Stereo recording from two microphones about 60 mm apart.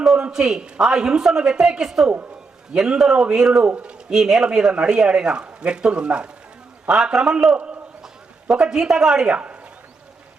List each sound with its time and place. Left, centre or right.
0.2 s speech: centre
3.6 s a man's voice: right
4.1 s a man's voice: centre
9.3 s a man's voice: right